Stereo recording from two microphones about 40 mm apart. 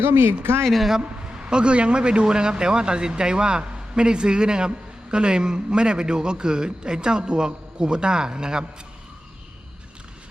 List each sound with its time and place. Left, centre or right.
0.0 s speech: right
0.8 s a man's voice: centre
1.0 s a man's voice: right